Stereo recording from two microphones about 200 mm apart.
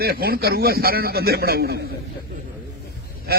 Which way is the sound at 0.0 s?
50° right (ahead or behind).